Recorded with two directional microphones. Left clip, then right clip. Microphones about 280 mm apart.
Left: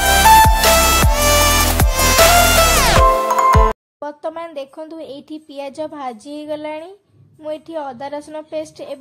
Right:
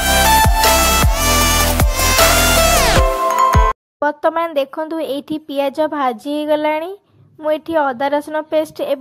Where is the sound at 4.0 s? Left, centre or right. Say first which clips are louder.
Right 10 dB; centre.